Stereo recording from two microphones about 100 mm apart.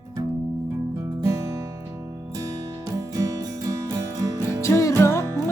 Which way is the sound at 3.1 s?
35° right (ahead or behind).